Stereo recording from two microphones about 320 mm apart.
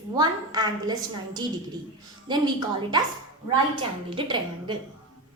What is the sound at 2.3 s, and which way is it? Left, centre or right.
Speech, centre.